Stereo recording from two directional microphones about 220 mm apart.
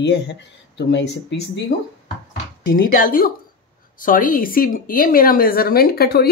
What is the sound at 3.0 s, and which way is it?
Speech, 40° left (ahead or behind).